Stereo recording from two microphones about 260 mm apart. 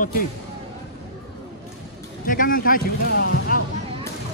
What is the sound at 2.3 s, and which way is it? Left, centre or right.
Speech, left.